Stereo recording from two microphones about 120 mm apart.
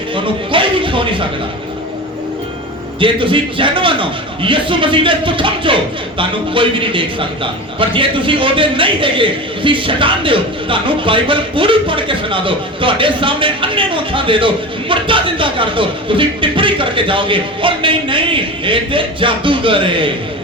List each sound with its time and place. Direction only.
0.1 s speech: 45° right (ahead or behind)
3.0 s a man's voice: 45° right (ahead or behind)